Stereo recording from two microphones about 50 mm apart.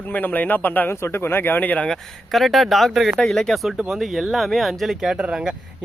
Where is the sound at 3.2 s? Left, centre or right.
Centre.